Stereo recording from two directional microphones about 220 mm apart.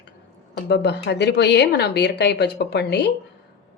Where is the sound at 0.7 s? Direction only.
50° left (ahead or behind).